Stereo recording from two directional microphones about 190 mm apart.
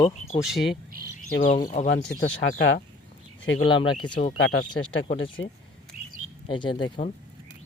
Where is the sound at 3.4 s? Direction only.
90° left.